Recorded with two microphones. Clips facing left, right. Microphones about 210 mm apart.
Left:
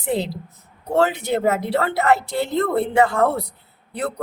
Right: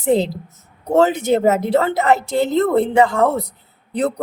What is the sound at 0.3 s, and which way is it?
Speech, 45° right (ahead or behind).